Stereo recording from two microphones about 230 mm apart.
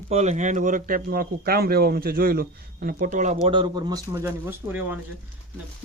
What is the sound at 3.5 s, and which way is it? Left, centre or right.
Speech, centre.